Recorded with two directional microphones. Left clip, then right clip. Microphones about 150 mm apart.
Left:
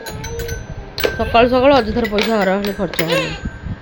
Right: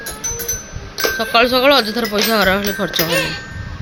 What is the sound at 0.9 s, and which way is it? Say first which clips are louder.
Speech: even; 25° left (ahead or behind).